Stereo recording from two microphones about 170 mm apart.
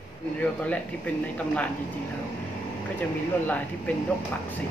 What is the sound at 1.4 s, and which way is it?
Speech, 10° left (ahead or behind).